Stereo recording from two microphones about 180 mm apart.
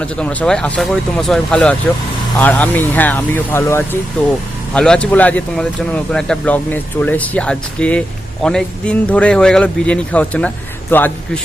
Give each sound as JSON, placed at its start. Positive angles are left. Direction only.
{"t": 0.0, "sound": "speech", "side_deg": 5}